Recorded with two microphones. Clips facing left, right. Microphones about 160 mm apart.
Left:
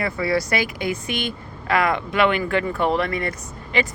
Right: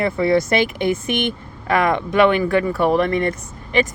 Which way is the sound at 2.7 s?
10° right (ahead or behind).